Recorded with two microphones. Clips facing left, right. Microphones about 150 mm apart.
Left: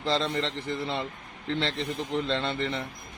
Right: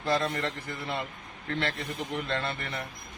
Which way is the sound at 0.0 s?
25° left (ahead or behind).